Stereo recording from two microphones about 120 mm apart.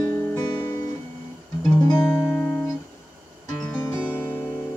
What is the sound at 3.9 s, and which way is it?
Music, 15° left (ahead or behind).